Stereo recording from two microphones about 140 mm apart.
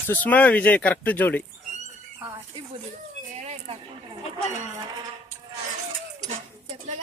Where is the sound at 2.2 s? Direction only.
20° right (ahead or behind).